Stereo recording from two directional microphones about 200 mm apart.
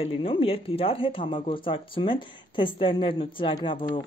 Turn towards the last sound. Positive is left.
turn(degrees=25)  # may be behind; listen again after turning